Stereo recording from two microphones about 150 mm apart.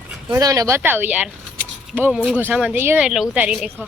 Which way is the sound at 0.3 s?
25° right (ahead or behind).